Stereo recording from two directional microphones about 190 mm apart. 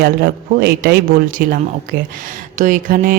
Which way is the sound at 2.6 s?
45° right (ahead or behind).